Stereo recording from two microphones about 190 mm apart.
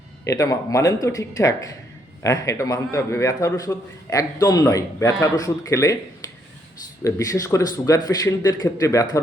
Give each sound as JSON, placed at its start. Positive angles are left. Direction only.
{"t": 0.3, "sound": "a man's voice", "side_deg": 15}
{"t": 7.0, "sound": "a man's voice", "side_deg": 15}